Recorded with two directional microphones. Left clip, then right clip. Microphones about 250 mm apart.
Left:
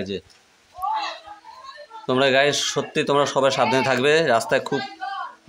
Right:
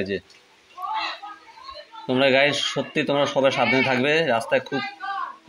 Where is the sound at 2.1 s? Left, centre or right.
Left.